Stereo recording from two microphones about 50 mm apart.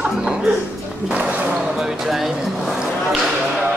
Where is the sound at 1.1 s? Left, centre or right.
Right.